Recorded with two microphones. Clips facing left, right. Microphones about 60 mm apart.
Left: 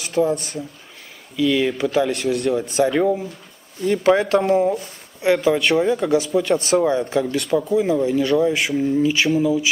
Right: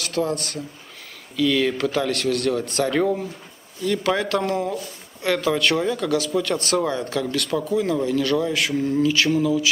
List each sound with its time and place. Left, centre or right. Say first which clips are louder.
0.0 s a sound: left 4 dB; centre
1.3 s speech: left 1 dB; centre
3.8 s speech: left 5 dB; left; by 5.9 s centre
5.9 s speech: left 4 dB; centre
8.3 s speech: left 4 dB; centre